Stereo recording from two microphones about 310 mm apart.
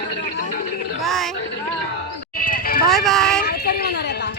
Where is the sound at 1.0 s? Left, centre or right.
Centre.